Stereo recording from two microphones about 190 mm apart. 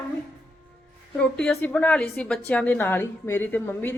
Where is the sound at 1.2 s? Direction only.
5° left (ahead or behind).